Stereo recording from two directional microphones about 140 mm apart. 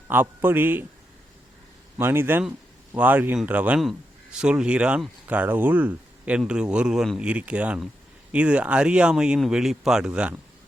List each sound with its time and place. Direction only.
0.1 s speech: 15° right (ahead or behind)
2.0 s speech: 15° right (ahead or behind)